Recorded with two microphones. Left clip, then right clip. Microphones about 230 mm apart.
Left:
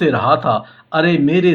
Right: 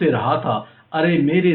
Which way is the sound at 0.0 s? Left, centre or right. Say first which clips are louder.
Left 4 dB; left.